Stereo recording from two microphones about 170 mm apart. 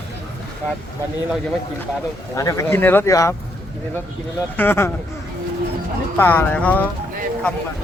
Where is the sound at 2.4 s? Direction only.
20° left (ahead or behind).